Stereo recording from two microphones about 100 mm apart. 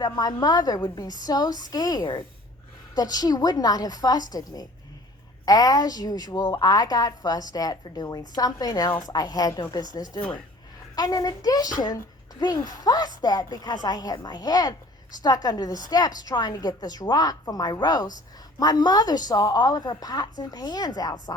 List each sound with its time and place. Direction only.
0.0 s a woman's voice: 40° left (ahead or behind)